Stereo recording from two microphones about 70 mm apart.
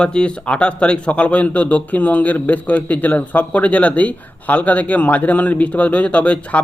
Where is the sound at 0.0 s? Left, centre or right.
Centre.